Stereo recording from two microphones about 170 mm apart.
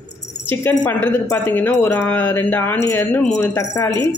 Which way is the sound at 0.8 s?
10° left (ahead or behind).